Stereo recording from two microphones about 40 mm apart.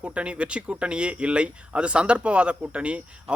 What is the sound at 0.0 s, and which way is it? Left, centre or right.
Speech, right.